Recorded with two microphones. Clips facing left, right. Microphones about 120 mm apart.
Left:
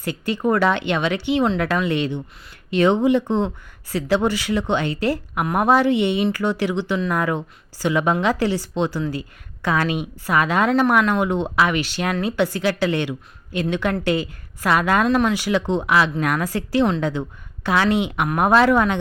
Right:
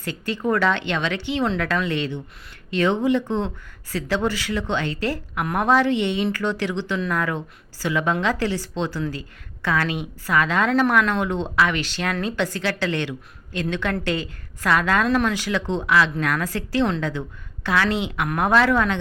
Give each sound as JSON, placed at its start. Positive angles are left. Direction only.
{"t": 0.0, "sound": "a woman's voice", "side_deg": 15}
{"t": 15.0, "sound": "a woman's voice", "side_deg": 5}